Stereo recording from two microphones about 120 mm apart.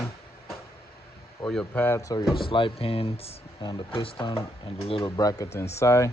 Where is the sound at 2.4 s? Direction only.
45° left (ahead or behind).